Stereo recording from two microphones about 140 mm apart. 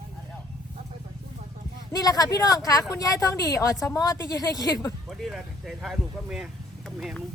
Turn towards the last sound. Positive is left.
turn(degrees=0)  # may be behind; listen again after turning